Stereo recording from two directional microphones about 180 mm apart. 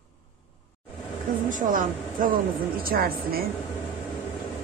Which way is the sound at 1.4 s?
45° right (ahead or behind).